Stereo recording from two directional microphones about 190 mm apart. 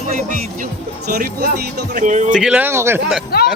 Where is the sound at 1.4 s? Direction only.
60° right (ahead or behind).